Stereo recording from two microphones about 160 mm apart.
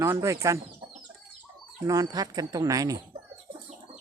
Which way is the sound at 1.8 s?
20° right (ahead or behind).